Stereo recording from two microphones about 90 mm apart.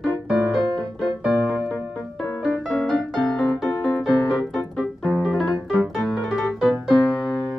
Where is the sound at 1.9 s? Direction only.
5° left (ahead or behind).